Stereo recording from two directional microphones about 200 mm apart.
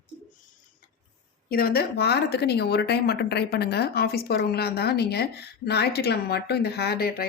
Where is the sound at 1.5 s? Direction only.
50° left (ahead or behind).